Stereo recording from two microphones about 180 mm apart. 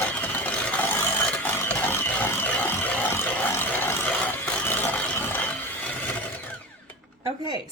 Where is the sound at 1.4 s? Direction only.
10° left (ahead or behind).